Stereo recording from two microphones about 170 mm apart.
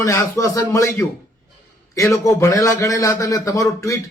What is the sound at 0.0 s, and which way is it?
A man's voice, 15° left (ahead or behind).